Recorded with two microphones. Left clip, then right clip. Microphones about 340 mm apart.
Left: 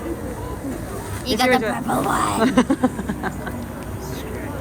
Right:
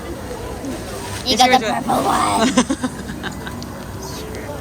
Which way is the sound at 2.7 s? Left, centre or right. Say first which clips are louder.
Left 3 dB; centre.